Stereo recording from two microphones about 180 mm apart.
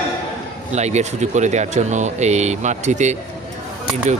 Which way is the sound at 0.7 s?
40° right (ahead or behind).